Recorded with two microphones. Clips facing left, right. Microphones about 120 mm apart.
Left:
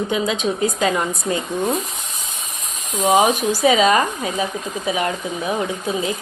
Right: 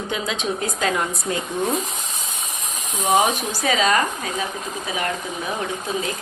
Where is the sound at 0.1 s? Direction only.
5° left (ahead or behind).